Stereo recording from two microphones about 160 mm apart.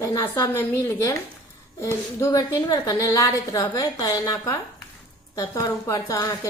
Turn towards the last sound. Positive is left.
turn(degrees=20)  # may be behind; listen again after turning